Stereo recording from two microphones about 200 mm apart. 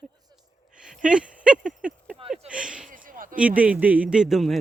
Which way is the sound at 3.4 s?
5° right (ahead or behind).